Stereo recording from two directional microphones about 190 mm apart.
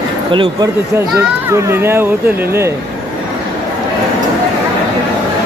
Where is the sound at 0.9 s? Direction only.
15° right (ahead or behind).